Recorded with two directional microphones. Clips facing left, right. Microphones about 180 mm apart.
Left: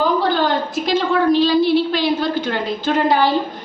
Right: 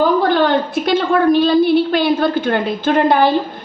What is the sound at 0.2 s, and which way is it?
A woman's voice, 60° right (ahead or behind).